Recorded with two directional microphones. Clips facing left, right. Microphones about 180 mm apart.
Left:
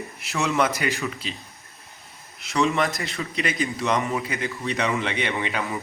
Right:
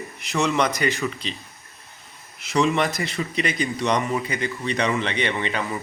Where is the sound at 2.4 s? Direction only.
Centre (ahead or behind).